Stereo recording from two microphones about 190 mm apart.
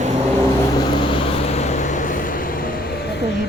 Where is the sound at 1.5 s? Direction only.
35° left (ahead or behind).